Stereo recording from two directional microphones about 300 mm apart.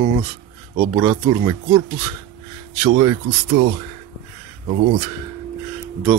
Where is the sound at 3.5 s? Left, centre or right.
Right.